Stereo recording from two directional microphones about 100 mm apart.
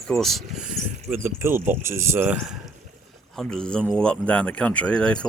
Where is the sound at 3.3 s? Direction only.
10° left (ahead or behind).